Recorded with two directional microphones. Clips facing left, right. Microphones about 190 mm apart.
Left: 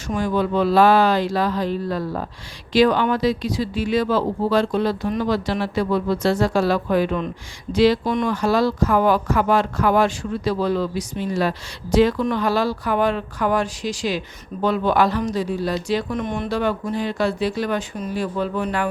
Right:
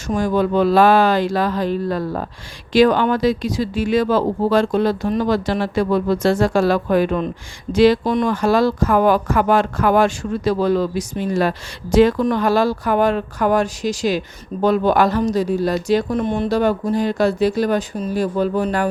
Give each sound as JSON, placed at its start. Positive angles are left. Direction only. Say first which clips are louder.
{"t": 0.1, "sound": "speech", "louder": "right 3 dB", "side_deg": -45}